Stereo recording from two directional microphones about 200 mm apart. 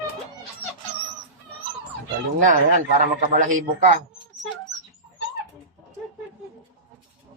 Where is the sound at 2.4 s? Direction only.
40° right (ahead or behind).